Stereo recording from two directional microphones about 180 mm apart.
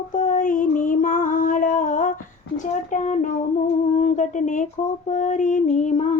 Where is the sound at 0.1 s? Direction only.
45° left (ahead or behind).